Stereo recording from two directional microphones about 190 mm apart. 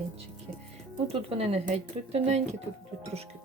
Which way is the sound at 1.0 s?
30° right (ahead or behind).